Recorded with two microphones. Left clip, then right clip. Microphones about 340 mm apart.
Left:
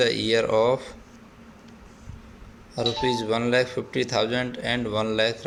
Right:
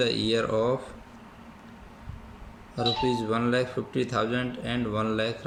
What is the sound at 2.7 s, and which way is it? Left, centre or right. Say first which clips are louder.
Speech: left 2 dB; centre.